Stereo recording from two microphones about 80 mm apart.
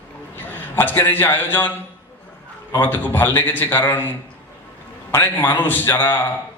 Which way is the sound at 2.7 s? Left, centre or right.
Left.